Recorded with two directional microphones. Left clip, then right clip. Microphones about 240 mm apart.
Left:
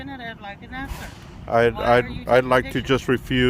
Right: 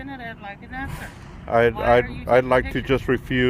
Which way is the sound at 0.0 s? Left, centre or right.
Left.